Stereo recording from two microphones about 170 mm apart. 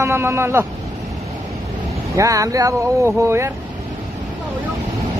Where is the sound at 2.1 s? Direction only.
20° right (ahead or behind).